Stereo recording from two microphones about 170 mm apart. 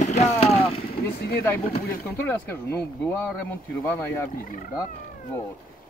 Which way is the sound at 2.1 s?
15° left (ahead or behind).